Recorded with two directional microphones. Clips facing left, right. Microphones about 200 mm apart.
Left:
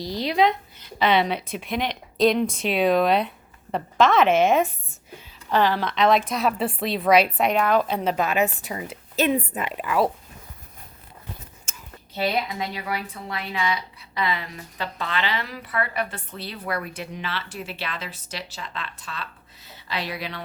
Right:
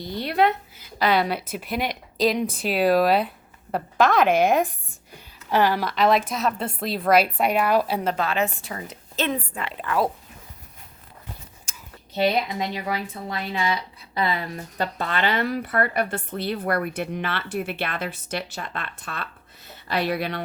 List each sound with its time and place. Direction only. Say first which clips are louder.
0.2 s speech: even; 5° right (ahead or behind)
8.0 s a woman's voice: left 2 dB; 15° left (ahead or behind)
12.1 s a woman's voice: right 3 dB; 20° right (ahead or behind); by 20.4 s 55° right (ahead or behind)